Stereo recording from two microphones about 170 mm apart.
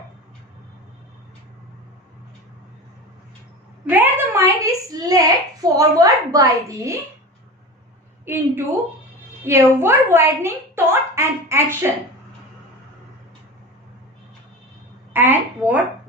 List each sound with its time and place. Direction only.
3.8 s a woman's voice: 10° right (ahead or behind)
8.2 s a woman's voice: 15° right (ahead or behind)
15.1 s a sound: 10° right (ahead or behind)